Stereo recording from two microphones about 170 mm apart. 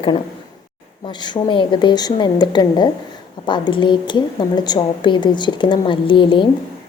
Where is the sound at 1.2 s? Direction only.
25° left (ahead or behind).